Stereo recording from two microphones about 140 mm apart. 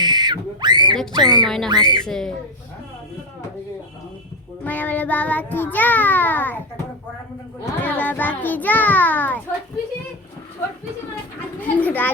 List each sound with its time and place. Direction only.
0.0 s a sound: 30° right (ahead or behind)
1.1 s speech: 30° right (ahead or behind)
2.0 s speech: 5° left (ahead or behind)
4.6 s child singing: 10° left (ahead or behind)
7.6 s child singing: 15° left (ahead or behind)
11.6 s child singing: 10° left (ahead or behind)